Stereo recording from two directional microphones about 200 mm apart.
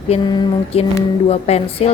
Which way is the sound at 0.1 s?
30° left (ahead or behind).